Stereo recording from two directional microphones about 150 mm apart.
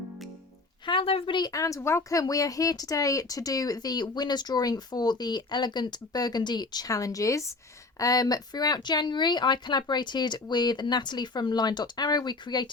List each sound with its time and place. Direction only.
0.9 s speech: 35° left (ahead or behind)